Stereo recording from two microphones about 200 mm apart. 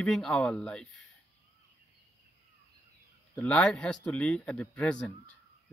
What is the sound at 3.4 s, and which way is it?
Speech, 5° left (ahead or behind).